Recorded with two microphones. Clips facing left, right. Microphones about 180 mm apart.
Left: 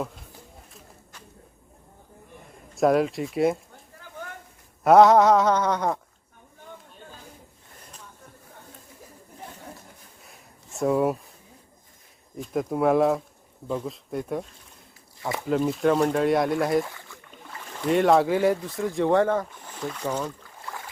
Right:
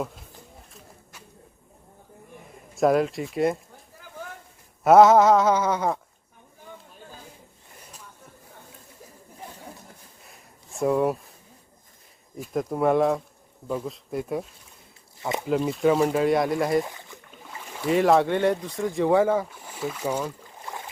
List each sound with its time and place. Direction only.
2.5 s speech: centre (ahead or behind)
4.8 s speech: centre (ahead or behind)
10.2 s a sound: centre (ahead or behind)
12.4 s speech: centre (ahead or behind)
15.2 s speech: 20° right (ahead or behind)
15.4 s speech: centre (ahead or behind)
16.8 s boat: 20° right (ahead or behind)
17.5 s speech: 10° right (ahead or behind)